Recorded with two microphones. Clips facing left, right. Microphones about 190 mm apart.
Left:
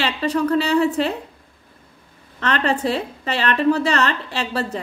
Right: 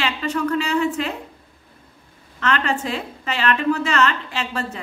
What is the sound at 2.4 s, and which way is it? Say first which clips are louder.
A woman's voice: left 2 dB; 35° left (ahead or behind).